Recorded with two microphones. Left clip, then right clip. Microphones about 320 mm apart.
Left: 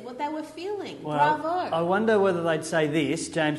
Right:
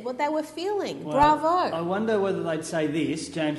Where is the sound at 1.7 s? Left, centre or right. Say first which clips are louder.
Left 3 dB; left.